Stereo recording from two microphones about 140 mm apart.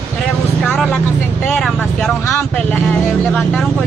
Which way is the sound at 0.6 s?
5° left (ahead or behind).